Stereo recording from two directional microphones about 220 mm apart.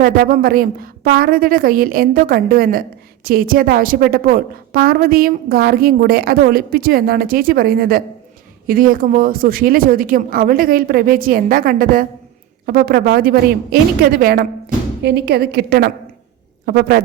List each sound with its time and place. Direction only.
0.0 s a woman's voice: 40° right (ahead or behind)